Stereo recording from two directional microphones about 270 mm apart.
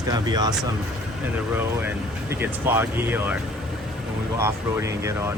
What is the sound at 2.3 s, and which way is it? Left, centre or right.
Speech, centre.